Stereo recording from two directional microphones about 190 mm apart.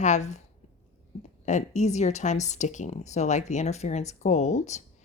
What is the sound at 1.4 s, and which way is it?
Speech, 40° left (ahead or behind).